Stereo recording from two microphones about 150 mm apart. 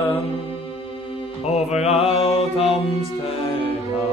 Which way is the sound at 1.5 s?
45° left (ahead or behind).